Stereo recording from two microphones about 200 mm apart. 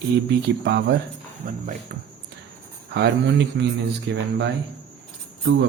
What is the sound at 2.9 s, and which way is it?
A man's voice, 60° right (ahead or behind).